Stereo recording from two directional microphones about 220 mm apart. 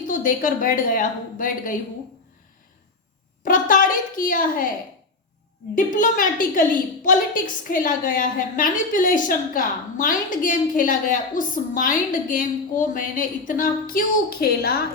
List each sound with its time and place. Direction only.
0.1 s a woman's voice: 40° left (ahead or behind)
3.4 s a woman's voice: 40° left (ahead or behind)
5.7 s a woman's voice: 35° left (ahead or behind)